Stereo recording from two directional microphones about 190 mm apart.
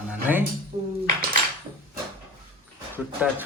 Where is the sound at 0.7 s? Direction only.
30° right (ahead or behind).